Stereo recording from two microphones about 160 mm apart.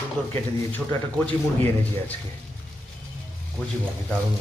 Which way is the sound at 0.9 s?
10° left (ahead or behind).